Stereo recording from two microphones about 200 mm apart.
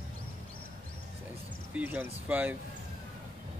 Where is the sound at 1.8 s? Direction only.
10° right (ahead or behind).